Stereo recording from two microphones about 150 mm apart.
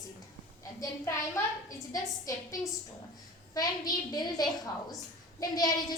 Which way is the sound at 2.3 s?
20° left (ahead or behind).